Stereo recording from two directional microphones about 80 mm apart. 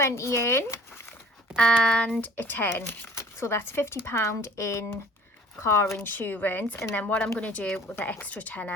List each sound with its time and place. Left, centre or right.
0.0 s speech: left
1.5 s speech: centre
2.2 s speech: left
6.0 s speech: left
7.9 s speech: left